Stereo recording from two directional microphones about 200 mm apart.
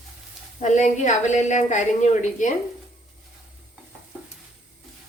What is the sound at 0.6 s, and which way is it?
A woman's voice, 35° left (ahead or behind).